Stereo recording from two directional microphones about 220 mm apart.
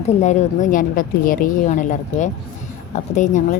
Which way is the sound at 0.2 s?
30° left (ahead or behind).